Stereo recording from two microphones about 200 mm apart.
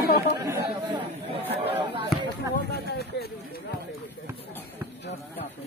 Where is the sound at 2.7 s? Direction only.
55° left (ahead or behind).